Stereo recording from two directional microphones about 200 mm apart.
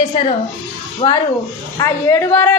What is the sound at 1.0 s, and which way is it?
Speech, 25° left (ahead or behind).